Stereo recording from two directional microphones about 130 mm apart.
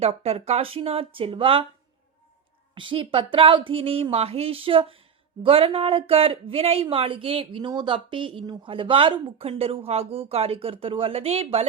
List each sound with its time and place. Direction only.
0.0 s a woman's voice: 50° right (ahead or behind)
2.7 s a woman's voice: 40° right (ahead or behind)